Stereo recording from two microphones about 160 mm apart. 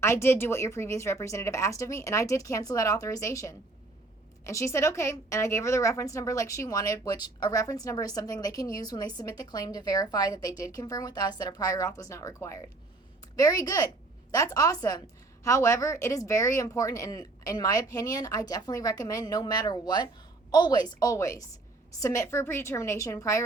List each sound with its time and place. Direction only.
0.0 s a woman's voice: 15° left (ahead or behind)